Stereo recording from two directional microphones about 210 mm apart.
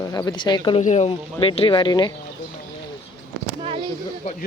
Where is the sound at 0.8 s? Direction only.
35° left (ahead or behind).